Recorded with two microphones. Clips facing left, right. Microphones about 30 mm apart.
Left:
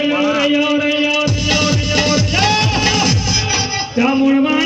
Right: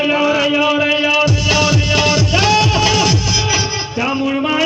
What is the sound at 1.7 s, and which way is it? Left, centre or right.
Music, right.